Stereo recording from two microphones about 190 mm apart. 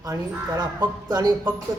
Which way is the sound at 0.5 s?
20° right (ahead or behind).